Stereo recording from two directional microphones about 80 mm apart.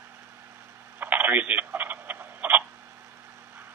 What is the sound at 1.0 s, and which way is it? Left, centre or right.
Telephone, right.